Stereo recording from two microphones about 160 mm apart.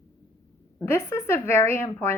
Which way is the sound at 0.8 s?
15° left (ahead or behind).